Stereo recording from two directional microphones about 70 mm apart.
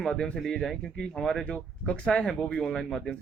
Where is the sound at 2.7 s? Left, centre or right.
Centre.